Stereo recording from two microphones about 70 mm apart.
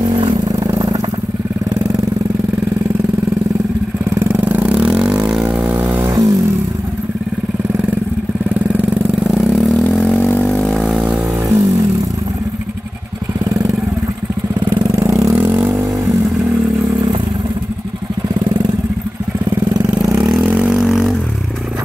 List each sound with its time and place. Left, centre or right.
0.0 s vehicle: right
4.1 s vehicle: right
4.7 s vehicle: centre
5.8 s vehicle: right
6.0 s vehicle: right
8.5 s vehicle: right
9.2 s vehicle: centre
10.1 s vehicle: left
10.6 s vehicle: centre
11.4 s vehicle: right
14.7 s vehicle: right
15.0 s vehicle: right
20.4 s vehicle: right
20.7 s vehicle: centre